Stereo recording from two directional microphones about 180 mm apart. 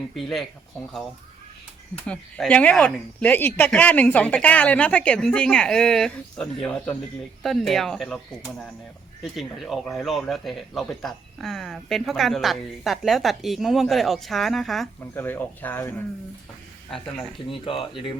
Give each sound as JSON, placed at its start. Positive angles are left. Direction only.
{"t": 0.2, "sound": "speech", "side_deg": 0}
{"t": 2.0, "sound": "speech", "side_deg": 5}
{"t": 15.1, "sound": "speech", "side_deg": 10}
{"t": 17.5, "sound": "speech", "side_deg": 30}